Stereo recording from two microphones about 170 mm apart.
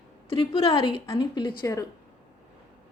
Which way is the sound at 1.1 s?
25° left (ahead or behind).